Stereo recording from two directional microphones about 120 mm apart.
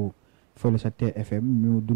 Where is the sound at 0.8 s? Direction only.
15° right (ahead or behind).